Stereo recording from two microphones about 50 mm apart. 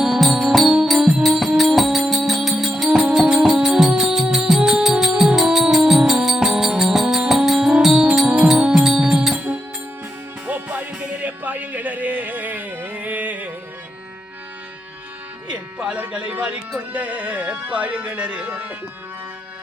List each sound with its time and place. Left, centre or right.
0.0 s music: centre
2.9 s music: centre
10.4 s music: right
15.4 s a sound: right
16.3 s music: right